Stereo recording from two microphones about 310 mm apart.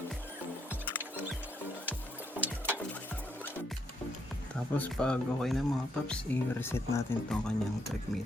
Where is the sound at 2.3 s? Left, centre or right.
Centre.